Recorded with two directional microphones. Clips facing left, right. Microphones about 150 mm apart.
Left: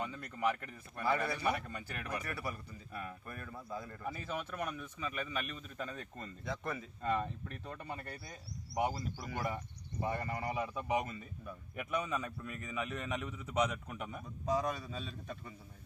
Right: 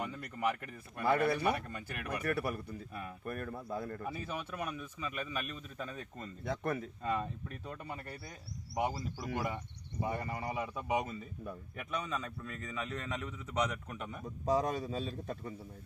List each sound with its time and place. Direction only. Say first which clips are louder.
0.0 s a man's voice: even; 5° right (ahead or behind)
1.0 s speech: right 4 dB; 60° right (ahead or behind)
4.1 s a man's voice: right 1 dB; 10° right (ahead or behind)
6.4 s speech: right 5 dB; 55° right (ahead or behind)
7.0 s speech: left 5 dB; 5° right (ahead or behind)
11.9 s a man's voice: left 2 dB; 15° left (ahead or behind)
14.4 s a man's voice: right 3 dB; 35° right (ahead or behind)